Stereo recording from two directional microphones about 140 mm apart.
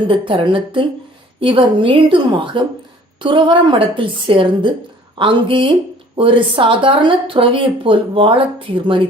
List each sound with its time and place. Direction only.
0.1 s speech: 40° right (ahead or behind)